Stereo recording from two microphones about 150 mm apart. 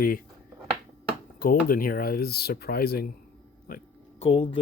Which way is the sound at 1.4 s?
70° left (ahead or behind).